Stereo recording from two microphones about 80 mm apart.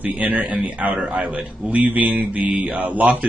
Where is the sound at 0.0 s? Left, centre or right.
Centre.